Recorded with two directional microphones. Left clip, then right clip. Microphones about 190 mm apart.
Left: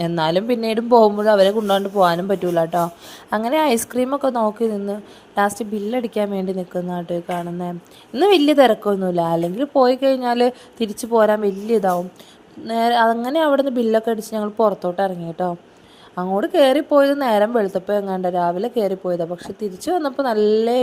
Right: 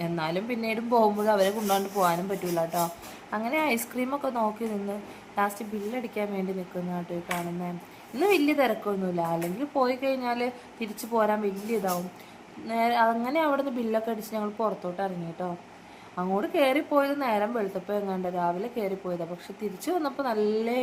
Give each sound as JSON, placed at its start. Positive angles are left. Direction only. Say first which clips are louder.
{"t": 0.0, "sound": "speech", "louder": "left 11 dB", "side_deg": 45}